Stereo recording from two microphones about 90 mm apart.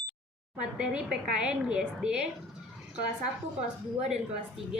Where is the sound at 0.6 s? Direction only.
10° right (ahead or behind).